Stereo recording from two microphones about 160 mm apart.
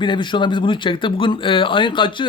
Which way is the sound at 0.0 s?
30° left (ahead or behind).